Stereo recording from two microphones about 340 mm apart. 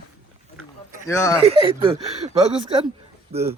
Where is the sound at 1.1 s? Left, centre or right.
Centre.